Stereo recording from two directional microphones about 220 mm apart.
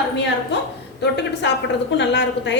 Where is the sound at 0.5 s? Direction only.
55° left (ahead or behind).